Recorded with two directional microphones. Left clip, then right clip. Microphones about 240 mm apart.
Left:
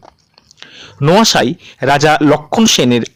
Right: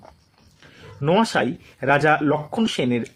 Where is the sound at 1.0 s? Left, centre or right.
Left.